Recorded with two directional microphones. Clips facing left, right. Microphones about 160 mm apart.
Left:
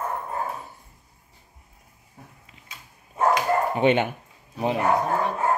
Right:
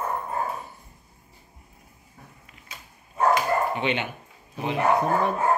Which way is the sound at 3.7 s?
45° left (ahead or behind).